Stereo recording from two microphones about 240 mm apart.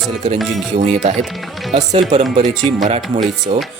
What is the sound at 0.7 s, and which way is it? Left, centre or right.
Speech, right.